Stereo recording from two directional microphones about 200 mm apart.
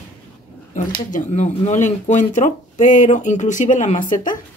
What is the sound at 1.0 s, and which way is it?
Speech, 40° left (ahead or behind).